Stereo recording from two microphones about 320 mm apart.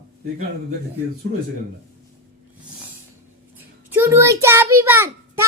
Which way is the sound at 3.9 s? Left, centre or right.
Centre.